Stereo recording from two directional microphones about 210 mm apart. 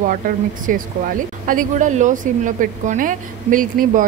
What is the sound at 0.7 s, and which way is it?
A woman's voice, 40° right (ahead or behind).